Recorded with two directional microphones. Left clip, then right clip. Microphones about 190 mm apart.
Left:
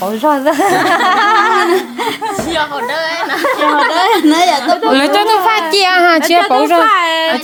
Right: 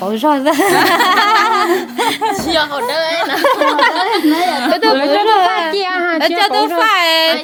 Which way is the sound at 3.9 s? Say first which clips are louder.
Left 4 dB; 65° left (ahead or behind).